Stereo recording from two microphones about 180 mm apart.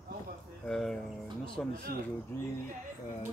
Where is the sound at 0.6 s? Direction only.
Centre (ahead or behind).